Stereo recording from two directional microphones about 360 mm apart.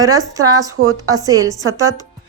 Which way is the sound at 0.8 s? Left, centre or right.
Right.